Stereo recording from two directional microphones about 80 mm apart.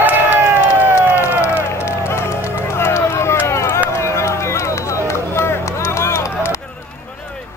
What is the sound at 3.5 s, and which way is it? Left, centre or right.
Run, left.